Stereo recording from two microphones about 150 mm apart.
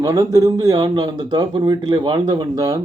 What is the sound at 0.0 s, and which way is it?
Speech, 20° right (ahead or behind).